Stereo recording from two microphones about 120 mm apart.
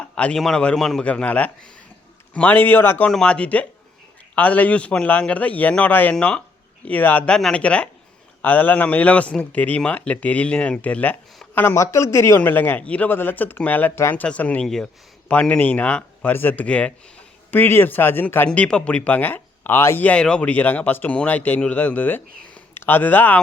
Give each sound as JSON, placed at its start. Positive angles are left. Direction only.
{"t": 0.0, "sound": "speech", "side_deg": 10}
{"t": 3.1, "sound": "speech", "side_deg": 5}